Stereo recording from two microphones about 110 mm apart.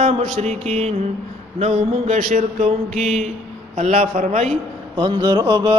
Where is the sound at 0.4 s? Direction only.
75° right (ahead or behind).